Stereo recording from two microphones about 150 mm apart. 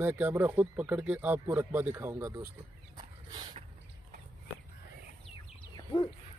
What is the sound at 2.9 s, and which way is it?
Dog, 30° right (ahead or behind).